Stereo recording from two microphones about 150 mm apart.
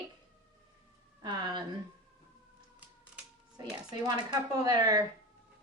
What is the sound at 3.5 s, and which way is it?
A woman's voice, 25° right (ahead or behind).